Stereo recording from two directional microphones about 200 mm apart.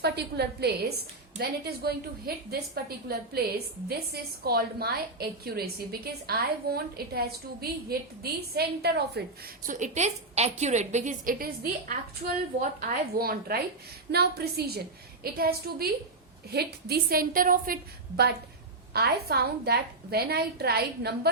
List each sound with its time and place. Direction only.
0.0 s a woman's voice: 55° right (ahead or behind)
9.6 s a woman's voice: 40° right (ahead or behind)
18.9 s a woman's voice: 50° right (ahead or behind)